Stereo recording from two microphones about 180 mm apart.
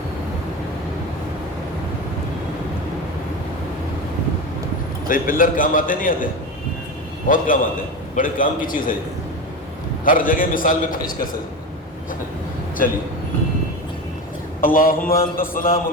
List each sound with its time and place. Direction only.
5.0 s a man's voice: 50° left (ahead or behind)
7.3 s a man's voice: 50° left (ahead or behind)
10.0 s a man's voice: 50° left (ahead or behind)
14.6 s a man's voice: 50° left (ahead or behind)